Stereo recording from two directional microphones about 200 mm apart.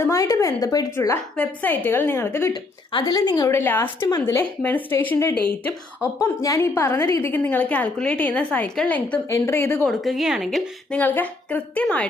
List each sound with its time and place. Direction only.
0.0 s a woman's voice: 15° left (ahead or behind)
9.9 s a woman's voice: centre (ahead or behind)